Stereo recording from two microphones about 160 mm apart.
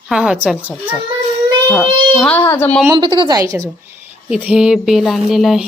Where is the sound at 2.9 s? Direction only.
30° right (ahead or behind).